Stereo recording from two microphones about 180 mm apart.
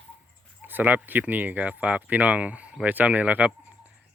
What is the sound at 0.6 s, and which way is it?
Speech, 10° right (ahead or behind).